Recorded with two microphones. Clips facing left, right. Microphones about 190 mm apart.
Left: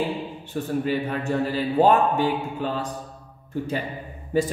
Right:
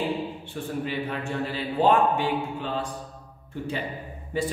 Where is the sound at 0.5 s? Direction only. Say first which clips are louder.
Left 9 dB; 40° left (ahead or behind).